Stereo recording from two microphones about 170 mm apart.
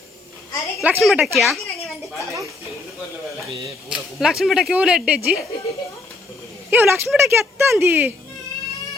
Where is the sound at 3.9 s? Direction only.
5° right (ahead or behind).